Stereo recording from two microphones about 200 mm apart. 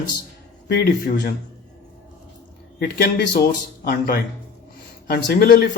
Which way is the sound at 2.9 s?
50° left (ahead or behind).